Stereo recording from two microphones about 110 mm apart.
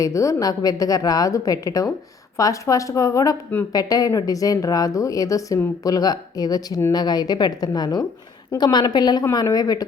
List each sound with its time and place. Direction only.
0.0 s a woman's voice: 30° left (ahead or behind)